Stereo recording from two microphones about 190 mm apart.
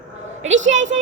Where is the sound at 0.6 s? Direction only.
40° right (ahead or behind).